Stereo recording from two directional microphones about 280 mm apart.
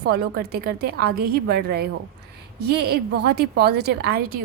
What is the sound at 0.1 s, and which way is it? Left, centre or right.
A woman's voice, right.